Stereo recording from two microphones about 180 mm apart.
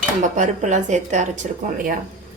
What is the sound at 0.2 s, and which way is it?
Speech, 45° right (ahead or behind).